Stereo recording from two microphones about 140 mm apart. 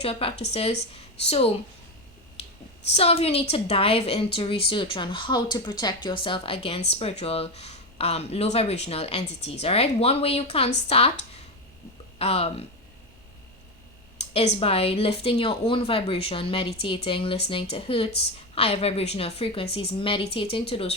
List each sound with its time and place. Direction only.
0.0 s a woman's voice: 45° left (ahead or behind)
2.9 s a woman's voice: 45° left (ahead or behind)
12.2 s a woman's voice: 45° left (ahead or behind)
14.2 s a woman's voice: 50° left (ahead or behind)